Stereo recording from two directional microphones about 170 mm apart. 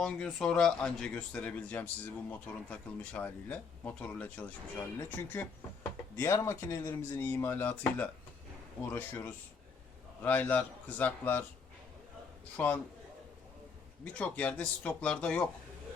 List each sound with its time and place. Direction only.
0.0 s speech: 5° left (ahead or behind)
12.5 s speech: 10° left (ahead or behind)
14.0 s speech: 5° left (ahead or behind)